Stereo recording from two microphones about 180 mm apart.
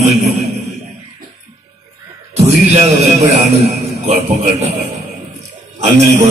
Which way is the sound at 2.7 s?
35° right (ahead or behind).